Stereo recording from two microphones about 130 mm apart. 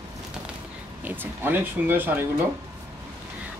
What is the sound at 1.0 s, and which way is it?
Speech, 15° right (ahead or behind).